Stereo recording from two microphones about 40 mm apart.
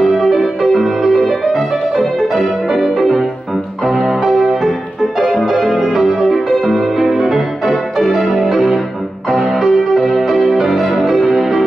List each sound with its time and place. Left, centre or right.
0.0 s music: centre
5.5 s keyboard: centre
5.9 s music: centre